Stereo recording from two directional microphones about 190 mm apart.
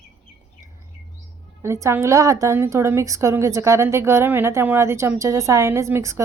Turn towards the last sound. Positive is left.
turn(degrees=-15)  # may be behind; listen again after turning